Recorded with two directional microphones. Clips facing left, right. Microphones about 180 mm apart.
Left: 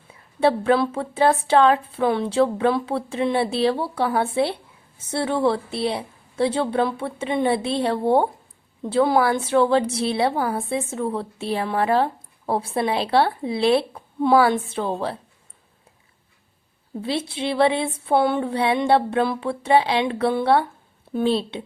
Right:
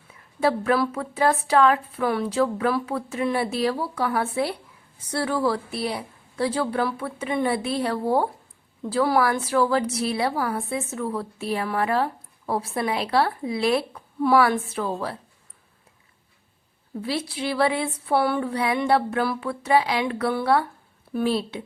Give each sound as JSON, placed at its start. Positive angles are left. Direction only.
{"t": 0.1, "sound": "a woman's voice", "side_deg": 30}
{"t": 17.0, "sound": "a woman's voice", "side_deg": 25}